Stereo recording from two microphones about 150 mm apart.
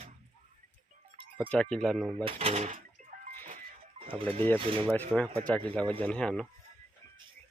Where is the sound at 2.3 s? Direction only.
45° right (ahead or behind).